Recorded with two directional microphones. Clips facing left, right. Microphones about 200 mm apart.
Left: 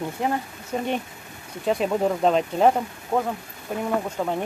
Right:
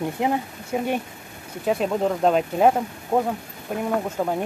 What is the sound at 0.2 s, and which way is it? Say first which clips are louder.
Speech: right 1 dB; 20° right (ahead or behind).